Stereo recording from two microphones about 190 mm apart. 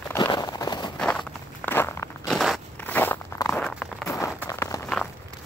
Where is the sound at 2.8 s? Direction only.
10° left (ahead or behind).